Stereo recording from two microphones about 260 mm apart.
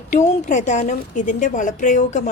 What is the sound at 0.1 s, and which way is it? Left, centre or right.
A woman's voice, left.